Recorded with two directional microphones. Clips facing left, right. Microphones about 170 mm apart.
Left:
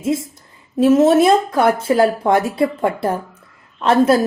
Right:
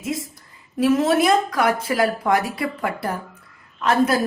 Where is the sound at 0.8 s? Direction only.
25° left (ahead or behind).